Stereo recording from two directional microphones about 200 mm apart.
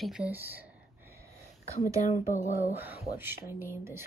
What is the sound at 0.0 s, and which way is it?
Speech, 5° right (ahead or behind).